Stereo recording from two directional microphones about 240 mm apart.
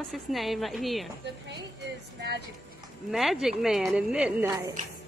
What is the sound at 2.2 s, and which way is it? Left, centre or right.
Speech, right.